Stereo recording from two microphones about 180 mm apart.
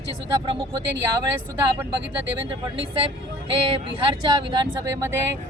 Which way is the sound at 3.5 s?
25° right (ahead or behind).